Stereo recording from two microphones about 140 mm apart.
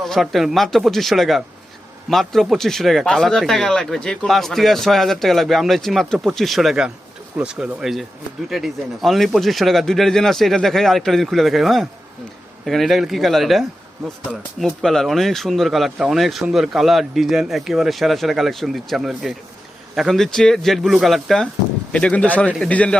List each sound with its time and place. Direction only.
0.0 s speech: centre (ahead or behind)